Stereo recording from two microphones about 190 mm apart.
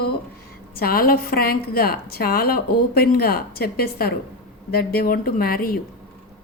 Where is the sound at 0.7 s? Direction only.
50° left (ahead or behind).